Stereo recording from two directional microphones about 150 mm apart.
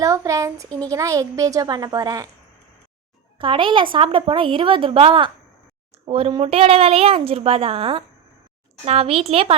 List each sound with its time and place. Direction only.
0.0 s a woman's voice: 20° right (ahead or behind)
3.3 s a woman's voice: 35° right (ahead or behind)